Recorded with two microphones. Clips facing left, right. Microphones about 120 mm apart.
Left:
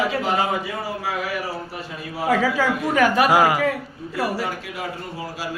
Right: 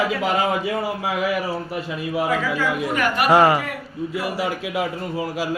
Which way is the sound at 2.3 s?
90° left.